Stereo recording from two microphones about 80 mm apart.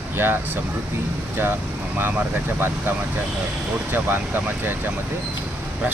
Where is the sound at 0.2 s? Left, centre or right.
Right.